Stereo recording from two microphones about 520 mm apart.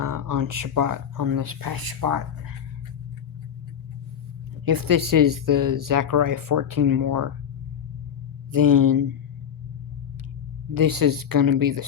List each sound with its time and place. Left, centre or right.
0.0 s speech: right
4.6 s speech: right
8.5 s speech: right
10.8 s speech: right